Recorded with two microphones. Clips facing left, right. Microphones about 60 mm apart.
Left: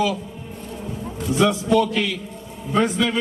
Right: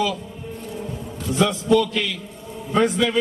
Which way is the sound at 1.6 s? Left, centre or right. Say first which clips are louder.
Right 4 dB; left.